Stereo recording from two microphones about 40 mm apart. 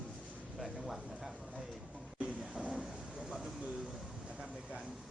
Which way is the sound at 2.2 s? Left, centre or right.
Right.